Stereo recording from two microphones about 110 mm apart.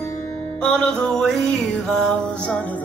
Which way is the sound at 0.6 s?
10° left (ahead or behind).